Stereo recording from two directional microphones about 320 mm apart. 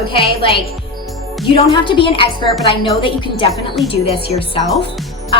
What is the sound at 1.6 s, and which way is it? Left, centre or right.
A woman's voice, centre.